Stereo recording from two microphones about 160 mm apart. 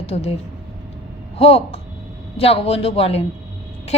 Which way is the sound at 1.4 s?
40° left (ahead or behind).